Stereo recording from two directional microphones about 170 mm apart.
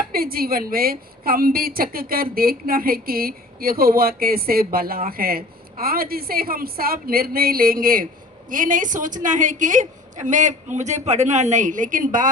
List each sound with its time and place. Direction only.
0.1 s a woman's voice: 60° right (ahead or behind)